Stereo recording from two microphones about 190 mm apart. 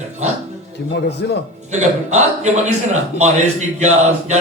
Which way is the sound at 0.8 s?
60° left (ahead or behind).